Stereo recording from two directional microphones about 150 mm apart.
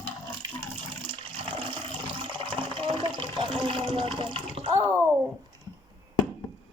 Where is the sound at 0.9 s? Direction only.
35° right (ahead or behind).